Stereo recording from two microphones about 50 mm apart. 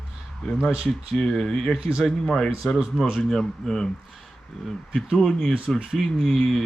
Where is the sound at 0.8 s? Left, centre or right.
Centre.